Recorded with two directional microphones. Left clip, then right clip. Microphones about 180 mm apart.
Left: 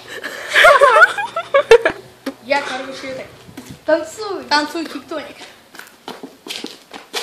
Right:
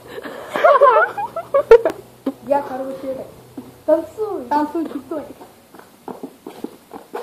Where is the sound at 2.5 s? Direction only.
30° left (ahead or behind).